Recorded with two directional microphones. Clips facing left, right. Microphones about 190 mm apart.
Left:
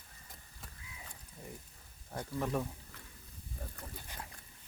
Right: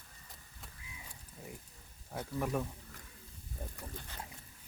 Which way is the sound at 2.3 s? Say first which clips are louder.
Even; 10° right (ahead or behind).